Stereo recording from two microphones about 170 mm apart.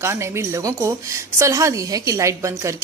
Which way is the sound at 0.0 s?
15° right (ahead or behind).